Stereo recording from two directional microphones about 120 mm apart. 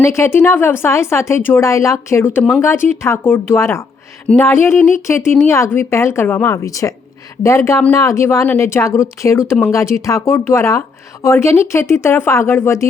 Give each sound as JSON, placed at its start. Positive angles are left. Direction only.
{"t": 0.0, "sound": "speech", "side_deg": 20}